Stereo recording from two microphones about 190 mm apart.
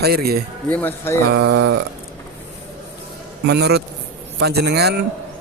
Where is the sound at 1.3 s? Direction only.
85° right.